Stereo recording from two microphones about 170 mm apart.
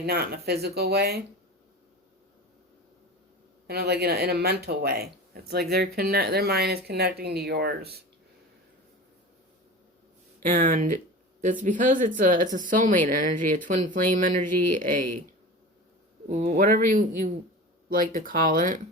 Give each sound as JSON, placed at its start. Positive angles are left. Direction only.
{"t": 0.0, "sound": "speech", "side_deg": -70}
{"t": 3.7, "sound": "speech", "side_deg": -70}
{"t": 10.4, "sound": "speech", "side_deg": -50}
{"t": 16.3, "sound": "speech", "side_deg": -45}